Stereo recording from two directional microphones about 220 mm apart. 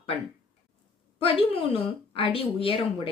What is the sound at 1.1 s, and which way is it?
Speech, 25° left (ahead or behind).